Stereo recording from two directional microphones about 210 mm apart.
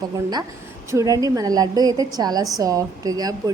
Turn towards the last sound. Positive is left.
turn(degrees=-15)  # may be behind; listen again after turning